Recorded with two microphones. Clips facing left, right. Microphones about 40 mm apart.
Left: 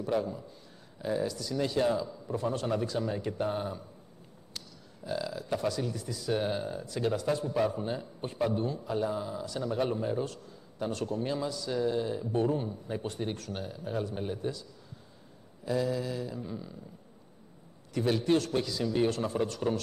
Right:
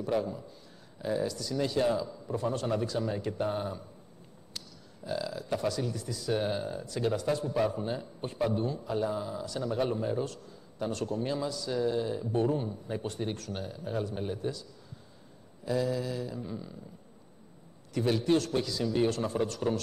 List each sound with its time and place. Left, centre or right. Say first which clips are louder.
0.0 s a man's voice: even; centre
17.9 s a man's voice: even; centre